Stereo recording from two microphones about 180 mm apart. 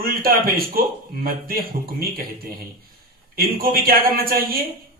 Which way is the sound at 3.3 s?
55° right (ahead or behind).